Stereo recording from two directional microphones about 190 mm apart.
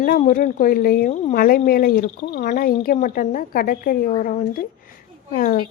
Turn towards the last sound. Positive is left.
turn(degrees=45)  # may be behind; listen again after turning